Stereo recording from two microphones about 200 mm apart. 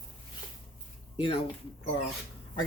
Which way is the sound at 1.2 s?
25° left (ahead or behind).